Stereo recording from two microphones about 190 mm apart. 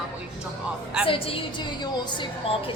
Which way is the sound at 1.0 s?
30° left (ahead or behind).